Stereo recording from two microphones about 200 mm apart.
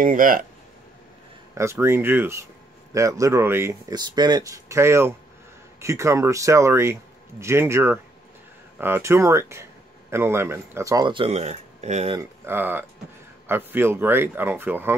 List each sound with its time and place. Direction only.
0.0 s speech: 40° right (ahead or behind)
1.6 s speech: 15° right (ahead or behind); by 12.2 s 35° right (ahead or behind)
12.2 s speech: 10° right (ahead or behind)